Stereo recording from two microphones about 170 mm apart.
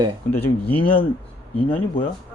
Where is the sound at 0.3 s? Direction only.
35° left (ahead or behind).